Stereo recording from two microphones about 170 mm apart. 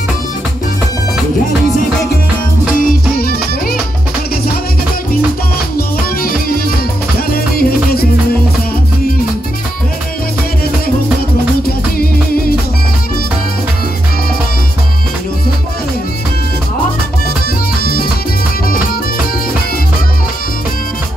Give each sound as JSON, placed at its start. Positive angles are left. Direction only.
{"t": 3.2, "sound": "music", "side_deg": 65}
{"t": 5.8, "sound": "music", "side_deg": 60}
{"t": 11.6, "sound": "music", "side_deg": 60}